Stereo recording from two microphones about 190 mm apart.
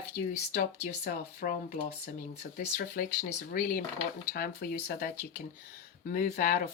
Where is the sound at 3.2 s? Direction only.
45° left (ahead or behind).